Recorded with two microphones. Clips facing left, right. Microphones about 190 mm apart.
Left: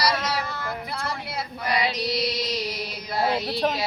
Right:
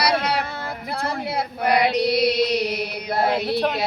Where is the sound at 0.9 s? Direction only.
60° right (ahead or behind).